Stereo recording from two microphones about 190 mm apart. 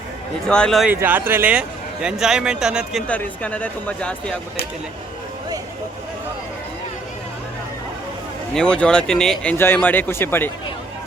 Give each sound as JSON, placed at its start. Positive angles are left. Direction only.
{"t": 0.4, "sound": "a man's voice", "side_deg": 5}
{"t": 0.9, "sound": "a man's voice", "side_deg": -10}
{"t": 8.5, "sound": "speech", "side_deg": 5}